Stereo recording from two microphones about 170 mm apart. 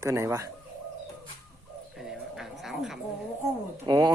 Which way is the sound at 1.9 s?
Centre (ahead or behind).